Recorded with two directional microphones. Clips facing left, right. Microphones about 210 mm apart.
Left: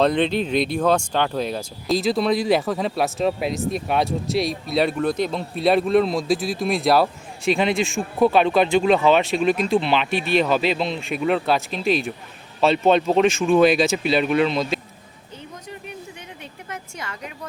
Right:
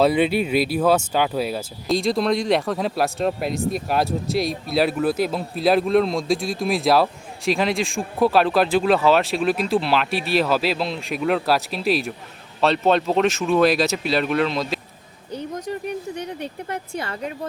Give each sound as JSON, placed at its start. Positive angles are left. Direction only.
{"t": 0.0, "sound": "speech", "side_deg": -5}
{"t": 15.3, "sound": "a sound", "side_deg": -40}
{"t": 17.0, "sound": "a woman's voice", "side_deg": -35}